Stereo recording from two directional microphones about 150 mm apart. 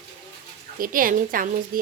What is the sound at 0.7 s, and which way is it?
Speech, 70° right (ahead or behind).